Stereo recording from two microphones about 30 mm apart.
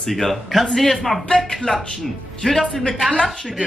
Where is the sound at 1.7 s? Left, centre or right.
Left.